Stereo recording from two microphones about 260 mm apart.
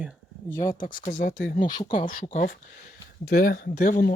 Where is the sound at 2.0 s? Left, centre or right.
Left.